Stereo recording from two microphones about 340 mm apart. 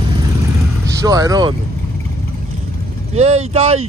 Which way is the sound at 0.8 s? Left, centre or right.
Centre.